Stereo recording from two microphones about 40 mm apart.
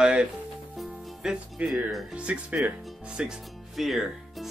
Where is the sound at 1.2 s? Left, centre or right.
Centre.